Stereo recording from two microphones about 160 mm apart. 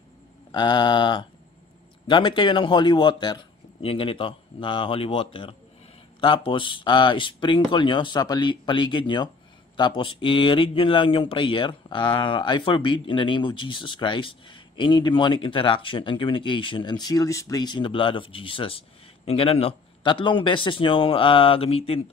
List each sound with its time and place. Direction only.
0.5 s speech: 30° left (ahead or behind)